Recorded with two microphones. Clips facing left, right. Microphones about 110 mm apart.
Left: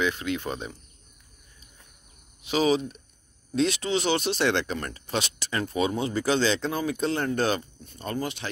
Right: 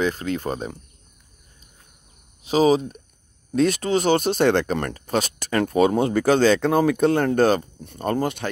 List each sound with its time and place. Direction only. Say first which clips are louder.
0.0 s speech: right 4 dB; 40° right (ahead or behind)
2.4 s speech: right 6 dB; 40° right (ahead or behind)
7.8 s speech: right 8 dB; 55° right (ahead or behind)